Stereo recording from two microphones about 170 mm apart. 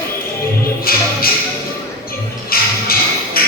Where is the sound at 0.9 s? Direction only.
60° left (ahead or behind).